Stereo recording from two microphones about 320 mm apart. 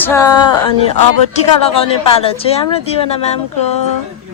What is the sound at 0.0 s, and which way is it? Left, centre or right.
Speech, centre.